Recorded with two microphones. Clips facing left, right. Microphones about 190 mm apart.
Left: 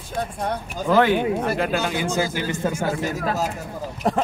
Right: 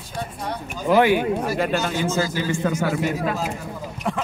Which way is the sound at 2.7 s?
35° left (ahead or behind).